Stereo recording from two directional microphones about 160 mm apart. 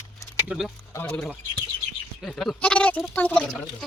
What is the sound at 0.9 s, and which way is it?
Bird, 15° left (ahead or behind).